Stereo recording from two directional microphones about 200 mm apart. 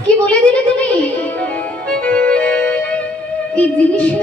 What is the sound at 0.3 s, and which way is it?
Music, 5° left (ahead or behind).